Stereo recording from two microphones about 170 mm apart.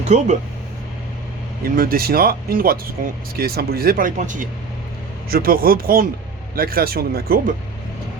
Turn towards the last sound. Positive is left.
turn(degrees=-60)  # may be behind; listen again after turning